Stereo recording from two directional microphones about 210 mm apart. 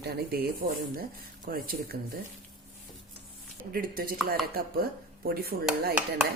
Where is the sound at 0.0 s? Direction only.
50° right (ahead or behind).